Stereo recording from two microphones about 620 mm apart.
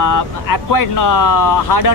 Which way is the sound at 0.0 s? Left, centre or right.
Left.